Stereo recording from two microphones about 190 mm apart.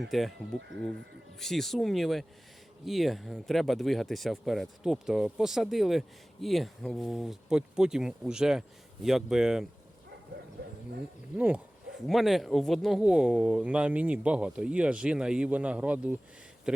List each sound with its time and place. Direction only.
0.1 s speech: centre (ahead or behind)
10.6 s bow-wow: 65° right (ahead or behind)
11.3 s speech: 5° right (ahead or behind)
16.7 s a sound: 5° right (ahead or behind)